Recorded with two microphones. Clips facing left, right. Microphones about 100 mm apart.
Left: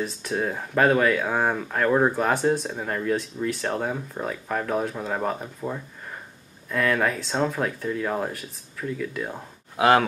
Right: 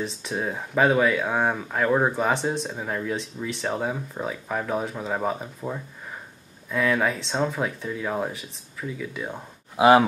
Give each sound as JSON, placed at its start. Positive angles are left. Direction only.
{"t": 0.0, "sound": "speech", "side_deg": 0}